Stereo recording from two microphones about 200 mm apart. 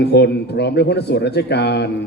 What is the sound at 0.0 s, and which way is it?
A man's voice, 55° left (ahead or behind).